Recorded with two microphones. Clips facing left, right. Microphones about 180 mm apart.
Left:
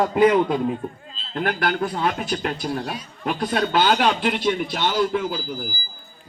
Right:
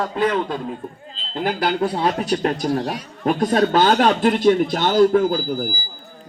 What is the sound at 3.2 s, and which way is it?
A man's voice, 40° right (ahead or behind).